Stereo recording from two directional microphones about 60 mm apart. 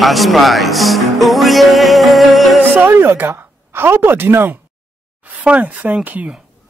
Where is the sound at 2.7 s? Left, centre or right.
Right.